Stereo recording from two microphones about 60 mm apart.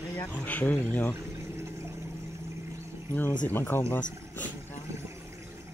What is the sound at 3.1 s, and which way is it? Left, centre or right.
Speech, left.